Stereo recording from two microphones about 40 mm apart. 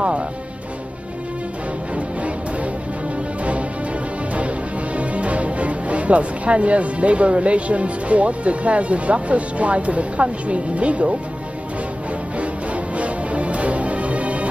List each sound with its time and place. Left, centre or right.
2.0 s music: right
4.9 s speech: right
12.9 s music: right